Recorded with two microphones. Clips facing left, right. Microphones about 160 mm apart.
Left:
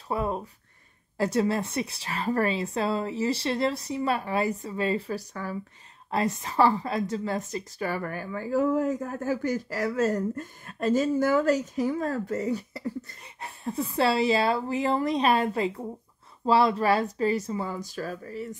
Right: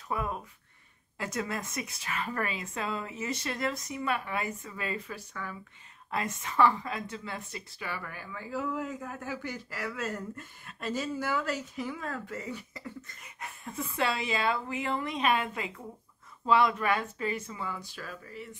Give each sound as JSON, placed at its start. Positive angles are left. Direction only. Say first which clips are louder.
{"t": 0.1, "sound": "a woman's voice", "louder": "left 5 dB", "side_deg": 30}